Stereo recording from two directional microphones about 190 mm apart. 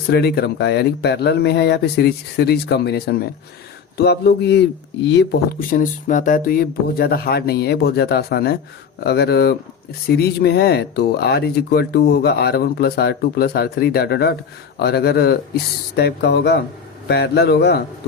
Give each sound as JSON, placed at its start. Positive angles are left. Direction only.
{"t": 0.1, "sound": "speech", "side_deg": 55}